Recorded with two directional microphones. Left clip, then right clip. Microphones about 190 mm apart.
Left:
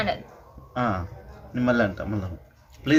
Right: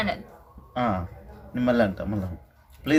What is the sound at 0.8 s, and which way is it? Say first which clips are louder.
Speech: even; 25° right (ahead or behind).